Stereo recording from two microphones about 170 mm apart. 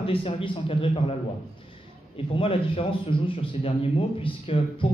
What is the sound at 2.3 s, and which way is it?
A man's voice, 30° left (ahead or behind).